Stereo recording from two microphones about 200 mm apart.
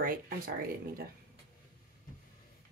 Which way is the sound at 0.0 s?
45° right (ahead or behind).